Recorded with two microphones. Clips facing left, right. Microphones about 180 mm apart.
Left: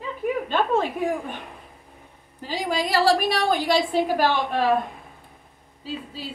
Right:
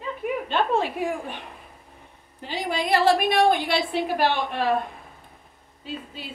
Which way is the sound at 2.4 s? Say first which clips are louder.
Left 2 dB; 40° left (ahead or behind).